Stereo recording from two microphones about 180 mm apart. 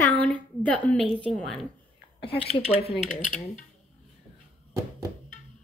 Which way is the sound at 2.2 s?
30° left (ahead or behind).